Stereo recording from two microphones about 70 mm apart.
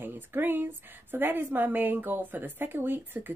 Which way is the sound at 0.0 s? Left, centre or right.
Right.